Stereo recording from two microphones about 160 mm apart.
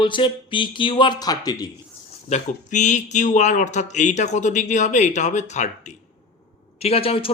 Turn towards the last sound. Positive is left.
turn(degrees=35)  # may be behind; listen again after turning